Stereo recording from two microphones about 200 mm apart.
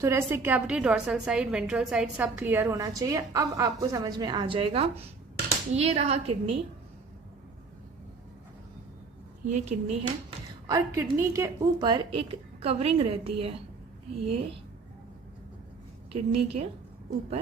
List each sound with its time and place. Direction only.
0.0 s a woman's voice: 15° right (ahead or behind); by 6.5 s 30° right (ahead or behind)
9.5 s a woman's voice: 35° right (ahead or behind)
10.7 s a woman's voice: 15° right (ahead or behind); by 14.6 s 30° right (ahead or behind)
16.1 s a woman's voice: 30° right (ahead or behind)